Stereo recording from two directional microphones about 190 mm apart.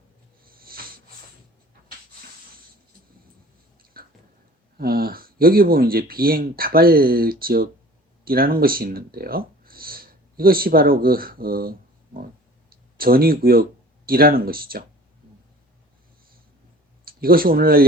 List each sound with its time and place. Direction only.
0.4 s a sound: 50° right (ahead or behind)
3.9 s tick-tock: 50° right (ahead or behind)
4.8 s speech: 50° right (ahead or behind)
17.1 s speech: 50° right (ahead or behind)